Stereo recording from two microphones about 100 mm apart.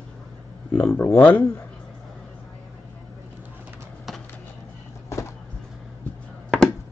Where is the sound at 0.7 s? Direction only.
20° left (ahead or behind).